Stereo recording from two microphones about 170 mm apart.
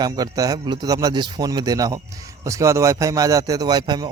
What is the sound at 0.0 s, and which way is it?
A man's voice, 20° right (ahead or behind).